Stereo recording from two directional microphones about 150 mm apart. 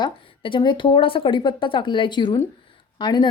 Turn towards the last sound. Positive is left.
turn(degrees=30)  # may be behind; listen again after turning